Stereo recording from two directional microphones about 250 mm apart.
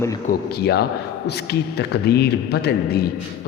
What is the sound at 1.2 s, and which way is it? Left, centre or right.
A man's voice, left.